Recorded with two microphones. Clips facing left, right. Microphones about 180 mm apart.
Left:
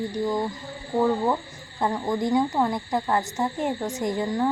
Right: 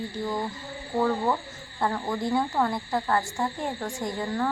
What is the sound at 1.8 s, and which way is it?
Speech, 15° left (ahead or behind).